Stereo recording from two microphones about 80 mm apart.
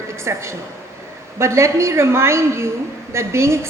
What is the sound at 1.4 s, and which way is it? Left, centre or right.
A woman's voice, right.